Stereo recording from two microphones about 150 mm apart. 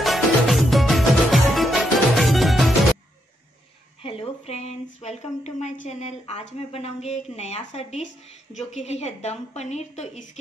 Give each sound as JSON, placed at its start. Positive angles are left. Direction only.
{"t": 0.0, "sound": "music", "side_deg": 0}
{"t": 4.0, "sound": "speech", "side_deg": 40}